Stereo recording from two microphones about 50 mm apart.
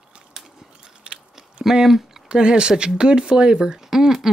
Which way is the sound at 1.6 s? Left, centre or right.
Centre.